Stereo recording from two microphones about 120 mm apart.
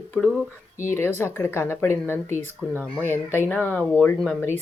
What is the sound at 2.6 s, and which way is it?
Speech, 15° right (ahead or behind).